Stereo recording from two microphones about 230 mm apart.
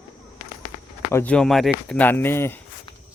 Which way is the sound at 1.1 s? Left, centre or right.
Centre.